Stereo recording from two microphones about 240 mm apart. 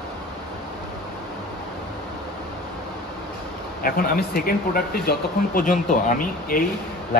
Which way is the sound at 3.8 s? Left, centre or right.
Left.